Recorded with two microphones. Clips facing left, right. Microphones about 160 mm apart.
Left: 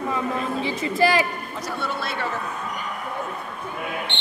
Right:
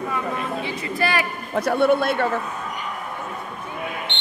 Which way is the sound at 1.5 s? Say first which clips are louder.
Right 11 dB; 60° right (ahead or behind).